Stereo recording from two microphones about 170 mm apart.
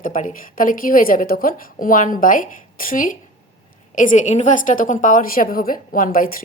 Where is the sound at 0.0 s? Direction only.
50° left (ahead or behind).